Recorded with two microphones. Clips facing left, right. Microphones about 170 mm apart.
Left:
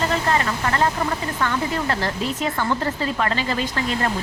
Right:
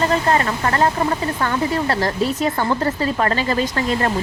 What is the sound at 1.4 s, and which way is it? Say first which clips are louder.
Speech: right 3 dB; 40° right (ahead or behind).